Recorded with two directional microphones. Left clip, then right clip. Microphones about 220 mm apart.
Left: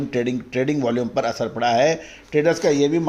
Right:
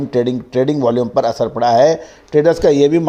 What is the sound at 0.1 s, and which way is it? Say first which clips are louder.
A man's voice: right 9 dB; 20° right (ahead or behind).